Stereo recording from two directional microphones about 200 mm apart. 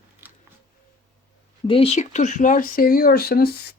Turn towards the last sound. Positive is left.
turn(degrees=50)  # may be behind; listen again after turning